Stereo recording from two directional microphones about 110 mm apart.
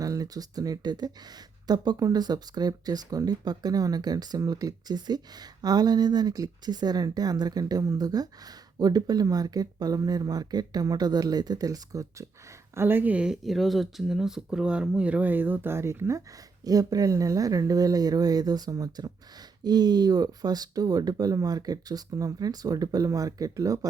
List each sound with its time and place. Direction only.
0.0 s speech: 35° right (ahead or behind)
12.7 s speech: 20° right (ahead or behind)